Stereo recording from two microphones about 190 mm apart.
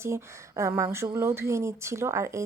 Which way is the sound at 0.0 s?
15° right (ahead or behind).